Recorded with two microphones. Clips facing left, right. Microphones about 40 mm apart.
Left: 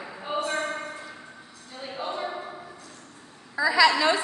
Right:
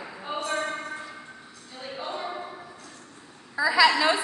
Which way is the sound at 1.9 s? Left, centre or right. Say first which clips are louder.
Left 2 dB; centre.